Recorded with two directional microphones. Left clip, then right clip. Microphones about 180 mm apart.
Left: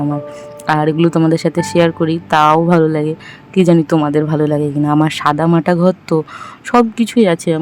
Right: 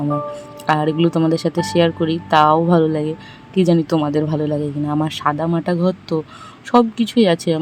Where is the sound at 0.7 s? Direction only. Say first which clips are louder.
Left 3 dB; 15° left (ahead or behind).